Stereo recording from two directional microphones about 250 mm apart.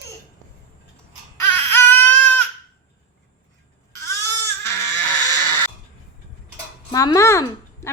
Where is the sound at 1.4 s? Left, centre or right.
Centre.